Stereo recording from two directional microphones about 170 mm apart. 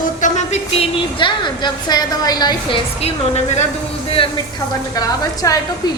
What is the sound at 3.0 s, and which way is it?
Speech, 40° left (ahead or behind).